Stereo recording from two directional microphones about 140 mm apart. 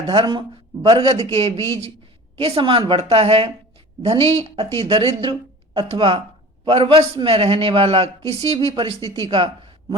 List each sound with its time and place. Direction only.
0.1 s a woman's voice: 35° right (ahead or behind)